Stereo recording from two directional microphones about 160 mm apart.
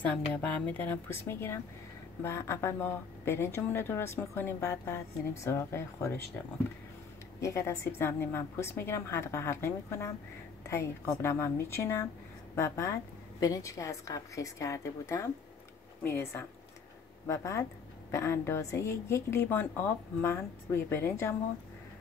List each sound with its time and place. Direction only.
0.0 s a woman's voice: 10° left (ahead or behind)
7.3 s a woman's voice: 20° left (ahead or behind)